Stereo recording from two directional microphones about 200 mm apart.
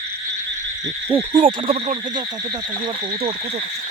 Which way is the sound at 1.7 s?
30° right (ahead or behind).